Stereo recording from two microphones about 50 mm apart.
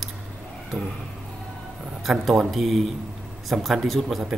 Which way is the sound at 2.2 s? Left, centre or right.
Centre.